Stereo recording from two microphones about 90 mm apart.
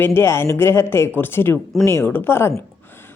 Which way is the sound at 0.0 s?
25° left (ahead or behind).